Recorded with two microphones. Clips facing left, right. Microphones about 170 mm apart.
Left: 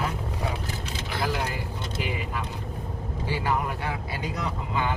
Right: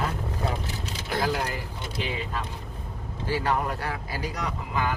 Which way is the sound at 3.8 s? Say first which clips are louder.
Even; 20° left (ahead or behind).